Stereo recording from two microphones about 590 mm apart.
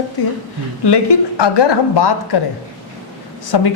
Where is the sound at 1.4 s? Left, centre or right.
Left.